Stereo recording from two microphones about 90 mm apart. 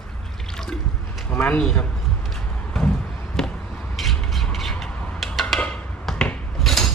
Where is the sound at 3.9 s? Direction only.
Centre (ahead or behind).